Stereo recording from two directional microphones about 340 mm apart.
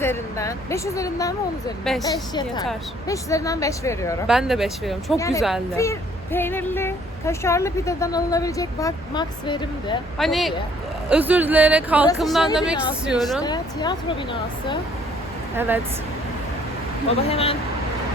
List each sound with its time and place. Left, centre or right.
0.0 s speech: centre
10.2 s speech: centre
13.4 s speech: centre
15.5 s speech: centre
17.2 s speech: centre